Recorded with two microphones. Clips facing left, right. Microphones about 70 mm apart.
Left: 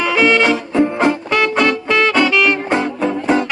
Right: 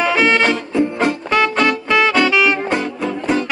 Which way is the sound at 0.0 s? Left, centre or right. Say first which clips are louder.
Left 1 dB; right.